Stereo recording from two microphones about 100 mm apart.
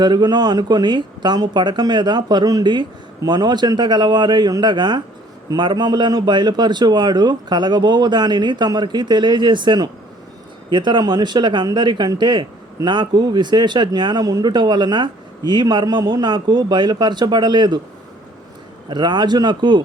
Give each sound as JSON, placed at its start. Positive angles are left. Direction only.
{"t": 0.0, "sound": "speech", "side_deg": -45}
{"t": 18.9, "sound": "speech", "side_deg": -50}